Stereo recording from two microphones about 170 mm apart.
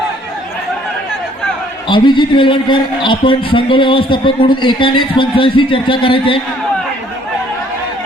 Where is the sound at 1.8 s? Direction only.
25° left (ahead or behind).